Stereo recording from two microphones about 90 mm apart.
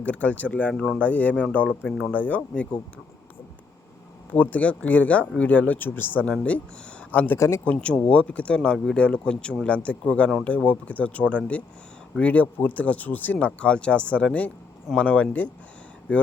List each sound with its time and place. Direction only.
0.0 s speech: 15° left (ahead or behind)
0.7 s speech: centre (ahead or behind)
0.9 s speech: 15° left (ahead or behind)
4.3 s speech: 20° left (ahead or behind)
7.3 s a man's voice: 35° left (ahead or behind)
7.6 s speech: 15° left (ahead or behind)